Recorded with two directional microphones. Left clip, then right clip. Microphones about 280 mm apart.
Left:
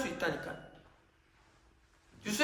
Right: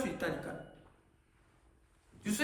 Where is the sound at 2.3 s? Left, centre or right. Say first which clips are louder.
Left 2 dB; left.